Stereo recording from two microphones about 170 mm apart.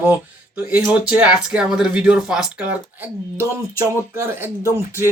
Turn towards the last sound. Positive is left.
turn(degrees=-15)  # may be behind; listen again after turning